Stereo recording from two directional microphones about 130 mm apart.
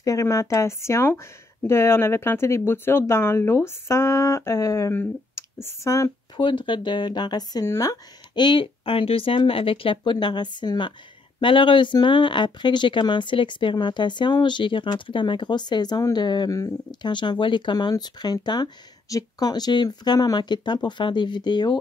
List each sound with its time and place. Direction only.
0.0 s speech: 25° left (ahead or behind)
6.4 s speech: 40° left (ahead or behind)